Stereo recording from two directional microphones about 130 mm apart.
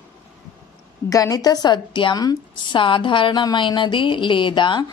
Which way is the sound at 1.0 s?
25° left (ahead or behind).